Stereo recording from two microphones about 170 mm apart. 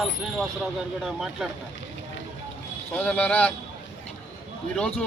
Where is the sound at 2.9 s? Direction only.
10° left (ahead or behind).